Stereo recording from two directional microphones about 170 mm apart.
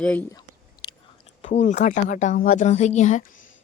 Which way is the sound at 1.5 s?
45° left (ahead or behind).